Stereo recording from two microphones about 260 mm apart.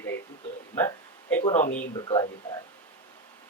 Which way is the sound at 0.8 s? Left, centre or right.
Centre.